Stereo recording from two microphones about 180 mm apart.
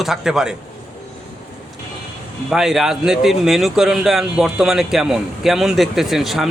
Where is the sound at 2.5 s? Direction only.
5° right (ahead or behind).